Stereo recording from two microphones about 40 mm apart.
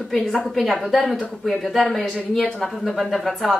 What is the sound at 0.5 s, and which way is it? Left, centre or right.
Speech, centre.